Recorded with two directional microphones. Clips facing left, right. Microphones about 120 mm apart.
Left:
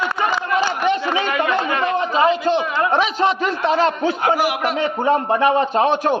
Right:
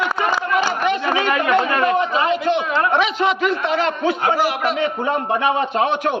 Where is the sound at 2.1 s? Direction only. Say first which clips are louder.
Left 2 dB; 30° left (ahead or behind).